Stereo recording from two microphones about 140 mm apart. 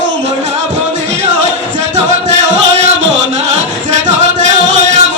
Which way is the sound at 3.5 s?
55° right (ahead or behind).